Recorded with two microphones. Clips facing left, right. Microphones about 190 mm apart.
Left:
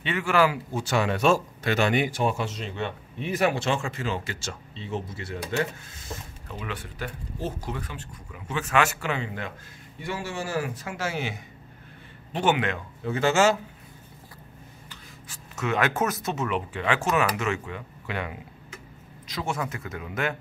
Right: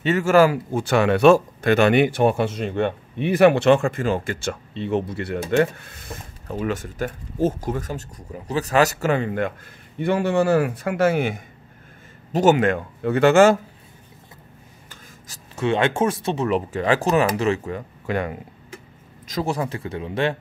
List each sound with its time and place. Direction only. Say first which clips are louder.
0.0 s speech: right 7 dB; 40° right (ahead or behind); by 6.1 s 60° right (ahead or behind)
6.4 s speech: right 13 dB; 45° right (ahead or behind)
12.3 s speech: right 8 dB; 40° right (ahead or behind)
14.9 s a man's voice: right 1 dB; 40° right (ahead or behind)